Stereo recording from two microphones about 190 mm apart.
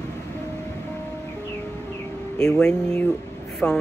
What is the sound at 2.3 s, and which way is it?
Speech, 5° left (ahead or behind).